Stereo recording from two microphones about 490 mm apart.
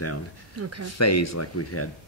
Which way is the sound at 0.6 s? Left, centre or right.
Right.